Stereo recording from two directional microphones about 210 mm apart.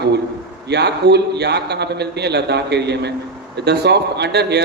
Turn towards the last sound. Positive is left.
turn(degrees=-50)  # may be behind; listen again after turning